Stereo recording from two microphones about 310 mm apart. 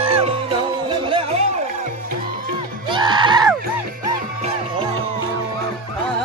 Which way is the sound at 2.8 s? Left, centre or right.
Centre.